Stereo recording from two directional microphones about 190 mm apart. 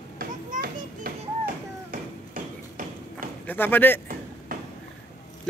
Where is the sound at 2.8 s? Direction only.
45° right (ahead or behind).